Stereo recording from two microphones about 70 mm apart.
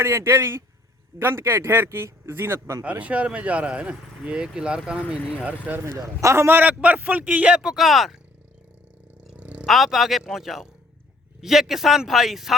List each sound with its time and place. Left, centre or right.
0.0 s speech: right
2.8 s speech: centre
6.1 s a man's voice: right
6.6 s speech: right; by 8.2 s centre
9.3 s a sound: centre
9.6 s speech: centre